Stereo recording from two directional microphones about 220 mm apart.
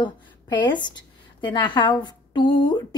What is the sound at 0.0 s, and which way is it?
Speech, 20° left (ahead or behind).